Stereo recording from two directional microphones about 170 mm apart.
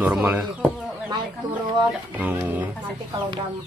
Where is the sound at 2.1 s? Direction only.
10° right (ahead or behind).